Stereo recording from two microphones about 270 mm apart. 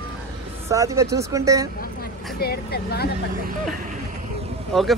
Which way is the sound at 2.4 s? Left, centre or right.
Left.